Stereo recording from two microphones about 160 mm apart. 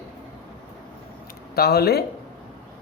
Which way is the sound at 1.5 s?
80° left.